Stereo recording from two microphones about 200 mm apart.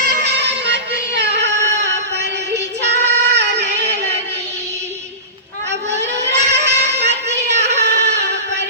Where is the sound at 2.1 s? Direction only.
60° right (ahead or behind).